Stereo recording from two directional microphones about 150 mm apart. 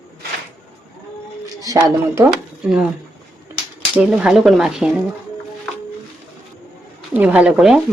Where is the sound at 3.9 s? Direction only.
5° right (ahead or behind).